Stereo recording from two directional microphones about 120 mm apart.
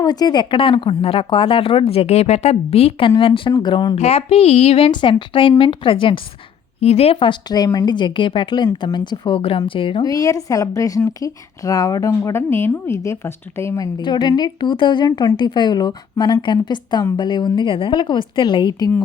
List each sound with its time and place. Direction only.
0.0 s speech: 35° left (ahead or behind)
0.5 s speech: 45° left (ahead or behind)
3.9 s speech: 60° left (ahead or behind)
4.9 s speech: 40° left (ahead or behind)
6.7 s speech: 60° left (ahead or behind)
10.0 s speech: 30° left (ahead or behind)